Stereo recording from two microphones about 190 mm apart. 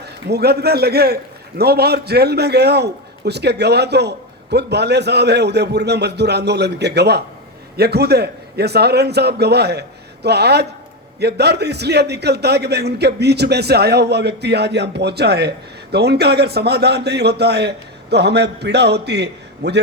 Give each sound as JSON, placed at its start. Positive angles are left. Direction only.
{"t": 0.3, "sound": "a man's voice", "side_deg": -60}